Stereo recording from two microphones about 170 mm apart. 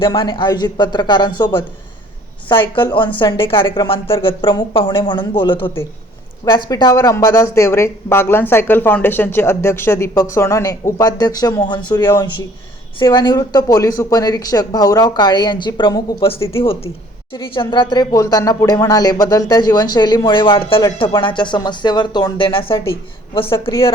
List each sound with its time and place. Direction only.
0.0 s a woman's voice: 30° left (ahead or behind)